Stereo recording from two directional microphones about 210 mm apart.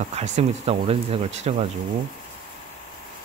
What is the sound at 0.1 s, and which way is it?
Speech, 30° right (ahead or behind).